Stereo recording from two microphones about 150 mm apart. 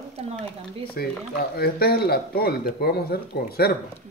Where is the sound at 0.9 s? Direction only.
90° left.